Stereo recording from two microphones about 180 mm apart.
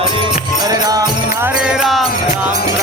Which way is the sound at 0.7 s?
20° right (ahead or behind).